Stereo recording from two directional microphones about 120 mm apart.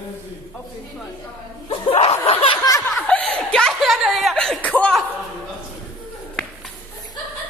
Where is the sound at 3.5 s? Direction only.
5° left (ahead or behind).